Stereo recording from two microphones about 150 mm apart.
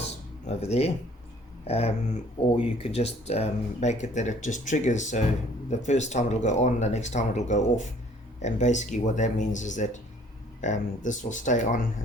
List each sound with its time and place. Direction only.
0.4 s speech: 45° left (ahead or behind)